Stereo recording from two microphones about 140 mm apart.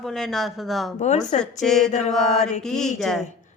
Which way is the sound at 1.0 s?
55° left (ahead or behind).